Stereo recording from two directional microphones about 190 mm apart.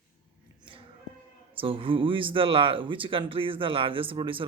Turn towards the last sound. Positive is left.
turn(degrees=-25)  # may be behind; listen again after turning